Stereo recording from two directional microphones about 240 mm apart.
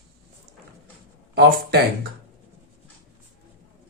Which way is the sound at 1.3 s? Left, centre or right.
Right.